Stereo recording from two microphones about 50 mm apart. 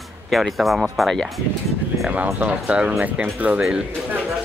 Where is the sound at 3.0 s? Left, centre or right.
Right.